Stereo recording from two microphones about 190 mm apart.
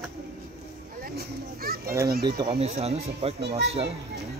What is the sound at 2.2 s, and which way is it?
Speech, 20° right (ahead or behind).